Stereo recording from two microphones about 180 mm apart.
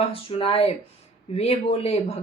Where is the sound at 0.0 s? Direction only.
30° left (ahead or behind).